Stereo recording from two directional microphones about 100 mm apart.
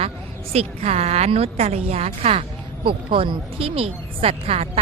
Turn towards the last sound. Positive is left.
turn(degrees=-85)